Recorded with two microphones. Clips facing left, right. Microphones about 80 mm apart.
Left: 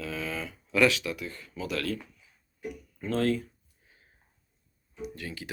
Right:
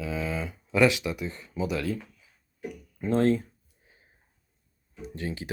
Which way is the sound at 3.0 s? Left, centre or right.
Right.